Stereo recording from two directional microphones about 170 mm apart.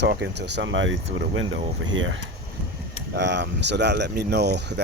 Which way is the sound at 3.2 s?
90° right.